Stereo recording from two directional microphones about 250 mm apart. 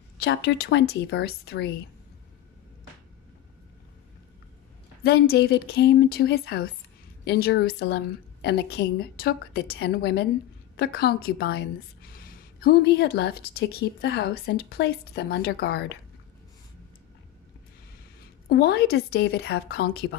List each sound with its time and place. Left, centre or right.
0.2 s a woman's voice: left
5.0 s a woman's voice: left
18.2 s a woman's voice: left